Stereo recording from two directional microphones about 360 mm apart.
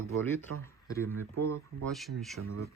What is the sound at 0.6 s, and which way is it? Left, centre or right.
Speech, centre.